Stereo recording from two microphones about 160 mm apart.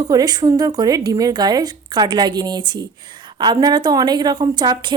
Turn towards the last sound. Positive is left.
turn(degrees=-25)  # may be behind; listen again after turning